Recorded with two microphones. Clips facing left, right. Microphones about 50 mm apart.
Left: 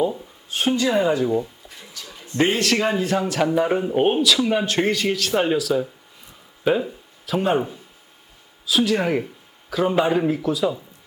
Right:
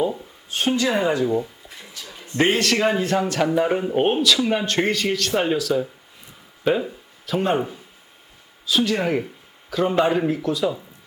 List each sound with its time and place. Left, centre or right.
0.0 s a sound: centre
0.9 s speech: right
1.9 s a sound: right
2.4 s speech: centre
2.7 s speech: right
3.0 s speech: centre
6.8 s speech: centre